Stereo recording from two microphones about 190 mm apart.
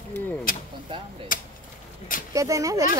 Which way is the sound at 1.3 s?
45° left (ahead or behind).